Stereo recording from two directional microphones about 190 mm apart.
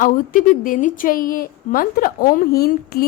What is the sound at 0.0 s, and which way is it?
A woman's voice, 45° left (ahead or behind).